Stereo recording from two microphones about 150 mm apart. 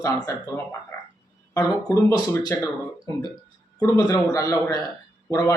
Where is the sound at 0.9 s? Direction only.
15° left (ahead or behind).